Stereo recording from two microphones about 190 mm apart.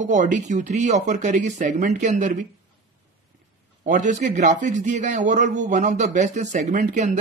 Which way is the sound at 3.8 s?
40° right (ahead or behind).